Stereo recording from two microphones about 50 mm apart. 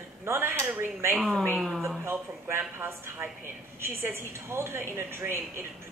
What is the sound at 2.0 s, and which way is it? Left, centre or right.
A woman's voice, right.